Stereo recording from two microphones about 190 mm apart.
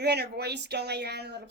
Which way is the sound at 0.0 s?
60° right (ahead or behind).